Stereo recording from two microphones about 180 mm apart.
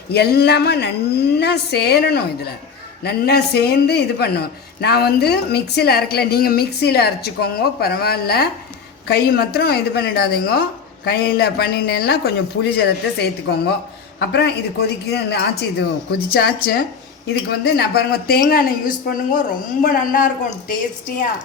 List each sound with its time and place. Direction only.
0.1 s a man's voice: 60° left (ahead or behind)